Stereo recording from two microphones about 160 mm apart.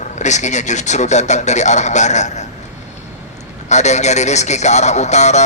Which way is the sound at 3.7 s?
45° left (ahead or behind).